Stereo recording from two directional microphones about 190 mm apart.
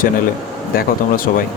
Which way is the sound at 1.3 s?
45° left (ahead or behind).